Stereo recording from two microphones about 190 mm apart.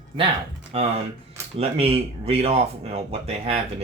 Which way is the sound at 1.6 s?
30° right (ahead or behind).